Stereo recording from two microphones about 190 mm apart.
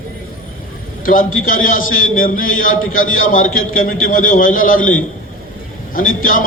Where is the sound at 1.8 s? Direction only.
90° left.